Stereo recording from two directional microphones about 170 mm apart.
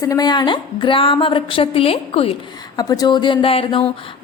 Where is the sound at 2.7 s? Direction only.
20° left (ahead or behind).